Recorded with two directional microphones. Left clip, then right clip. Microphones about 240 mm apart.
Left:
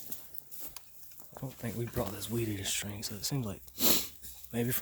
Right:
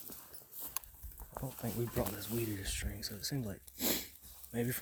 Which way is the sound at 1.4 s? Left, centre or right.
Centre.